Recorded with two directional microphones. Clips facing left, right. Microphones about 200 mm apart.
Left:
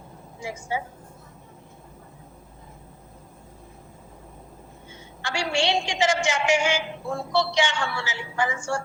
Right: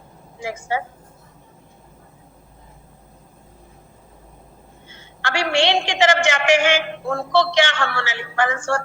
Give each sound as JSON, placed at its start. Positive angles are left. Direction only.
{"t": 0.3, "sound": "speech", "side_deg": -85}
{"t": 5.2, "sound": "a man's voice", "side_deg": -90}